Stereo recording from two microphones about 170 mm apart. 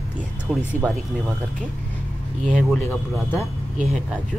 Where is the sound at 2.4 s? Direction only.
5° left (ahead or behind).